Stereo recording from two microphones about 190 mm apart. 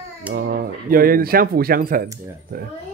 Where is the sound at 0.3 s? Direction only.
50° right (ahead or behind).